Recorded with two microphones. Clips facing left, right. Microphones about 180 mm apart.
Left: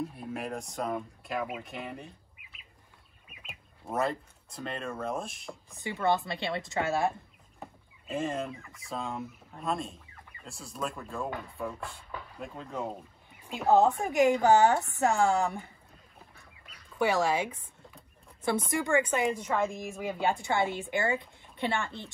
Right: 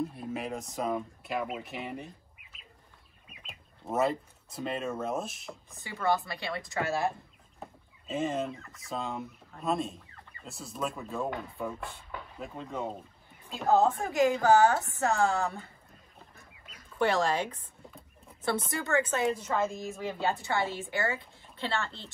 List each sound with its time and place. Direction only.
0.1 s speech: centre (ahead or behind)
3.3 s speech: centre (ahead or behind)
5.9 s speech: 20° left (ahead or behind)
7.6 s chicken: centre (ahead or behind)
8.6 s speech: centre (ahead or behind)
13.5 s speech: 15° left (ahead or behind)
17.0 s speech: 5° left (ahead or behind)